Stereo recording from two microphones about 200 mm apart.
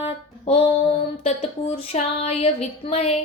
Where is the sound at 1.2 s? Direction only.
30° left (ahead or behind).